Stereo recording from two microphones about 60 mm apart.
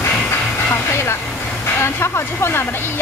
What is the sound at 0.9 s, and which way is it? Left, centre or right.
Speech, left.